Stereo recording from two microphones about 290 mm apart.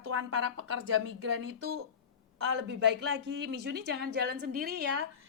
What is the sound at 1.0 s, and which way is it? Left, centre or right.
Speech, right.